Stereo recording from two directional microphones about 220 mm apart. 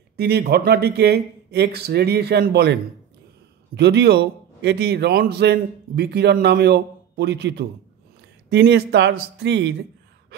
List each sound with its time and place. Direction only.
0.2 s a man's voice: 45° right (ahead or behind)